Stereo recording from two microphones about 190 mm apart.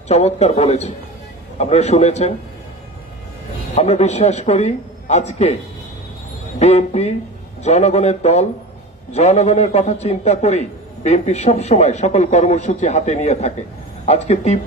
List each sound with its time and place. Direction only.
0.1 s a man's voice: 35° left (ahead or behind)
3.7 s a man's voice: 35° left (ahead or behind)
6.6 s a man's voice: 35° left (ahead or behind)